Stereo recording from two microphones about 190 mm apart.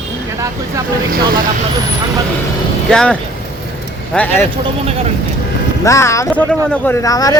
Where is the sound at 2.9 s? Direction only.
5° left (ahead or behind).